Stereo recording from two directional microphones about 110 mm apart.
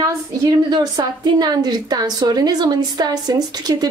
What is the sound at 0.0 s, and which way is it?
A woman's voice, 35° right (ahead or behind).